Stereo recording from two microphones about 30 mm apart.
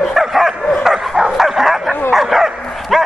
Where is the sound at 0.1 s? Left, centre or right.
Centre.